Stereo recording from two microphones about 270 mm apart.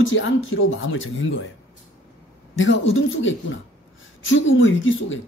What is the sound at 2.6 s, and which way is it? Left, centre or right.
Speech, left.